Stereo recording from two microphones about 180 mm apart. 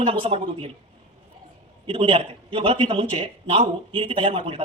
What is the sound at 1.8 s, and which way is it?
Speech, 30° right (ahead or behind).